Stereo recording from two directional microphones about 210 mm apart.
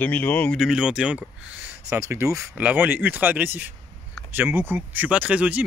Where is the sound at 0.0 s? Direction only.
5° left (ahead or behind).